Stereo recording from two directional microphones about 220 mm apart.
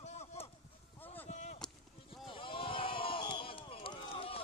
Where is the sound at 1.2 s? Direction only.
30° left (ahead or behind).